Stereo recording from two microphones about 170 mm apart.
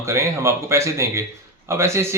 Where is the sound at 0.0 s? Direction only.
15° right (ahead or behind).